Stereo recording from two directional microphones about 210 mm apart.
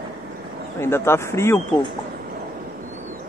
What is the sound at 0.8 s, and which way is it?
Speech, 10° left (ahead or behind).